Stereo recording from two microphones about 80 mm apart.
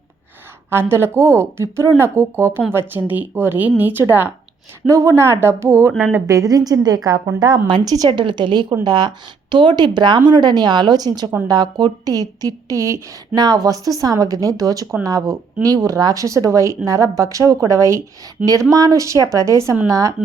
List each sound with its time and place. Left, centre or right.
0.7 s speech: right
4.9 s speech: right
6.2 s speech: right
8.1 s a woman's voice: right
8.8 s speech: right
13.3 s speech: right